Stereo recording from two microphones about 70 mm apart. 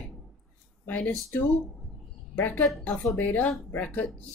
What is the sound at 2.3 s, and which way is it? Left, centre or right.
Speech, left.